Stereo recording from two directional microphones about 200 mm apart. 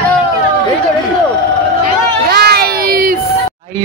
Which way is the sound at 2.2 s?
55° right (ahead or behind).